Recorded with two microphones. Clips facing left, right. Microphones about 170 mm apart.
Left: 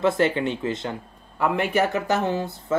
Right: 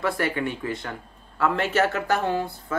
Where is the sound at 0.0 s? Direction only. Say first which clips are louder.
Left 5 dB; 25° left (ahead or behind).